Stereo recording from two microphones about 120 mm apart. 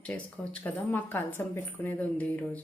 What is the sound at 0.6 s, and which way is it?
Speech, 15° left (ahead or behind).